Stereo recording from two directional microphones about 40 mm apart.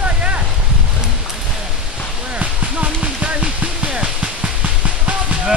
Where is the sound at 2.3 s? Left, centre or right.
Right.